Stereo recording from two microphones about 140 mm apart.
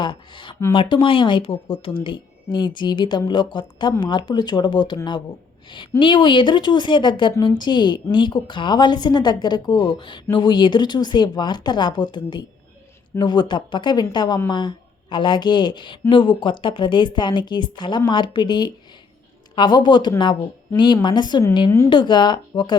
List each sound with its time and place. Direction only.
0.0 s a woman's voice: 35° left (ahead or behind)